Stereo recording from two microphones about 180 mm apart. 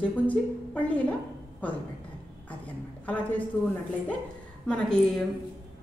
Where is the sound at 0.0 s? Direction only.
10° left (ahead or behind).